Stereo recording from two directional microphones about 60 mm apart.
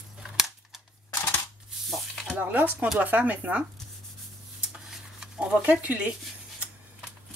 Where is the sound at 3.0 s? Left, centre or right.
Right.